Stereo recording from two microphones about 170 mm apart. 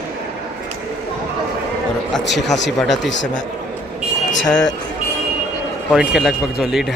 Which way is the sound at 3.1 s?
90° left.